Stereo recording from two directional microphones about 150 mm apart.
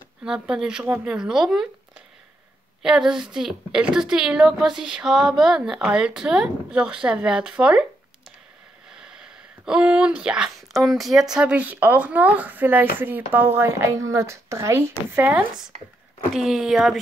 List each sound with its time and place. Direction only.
0.2 s a woman's voice: 5° right (ahead or behind)
2.8 s a woman's voice: 5° right (ahead or behind)
8.9 s speech: 5° right (ahead or behind)
16.3 s a woman's voice: centre (ahead or behind)